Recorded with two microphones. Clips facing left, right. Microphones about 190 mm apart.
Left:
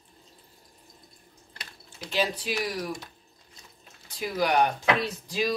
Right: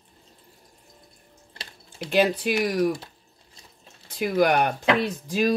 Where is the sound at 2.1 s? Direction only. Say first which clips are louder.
Right 7 dB; 55° right (ahead or behind).